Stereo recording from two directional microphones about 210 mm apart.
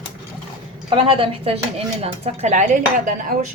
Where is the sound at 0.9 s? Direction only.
25° right (ahead or behind).